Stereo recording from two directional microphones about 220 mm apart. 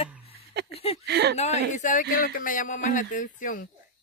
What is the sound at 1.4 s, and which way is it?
Speech, 30° left (ahead or behind).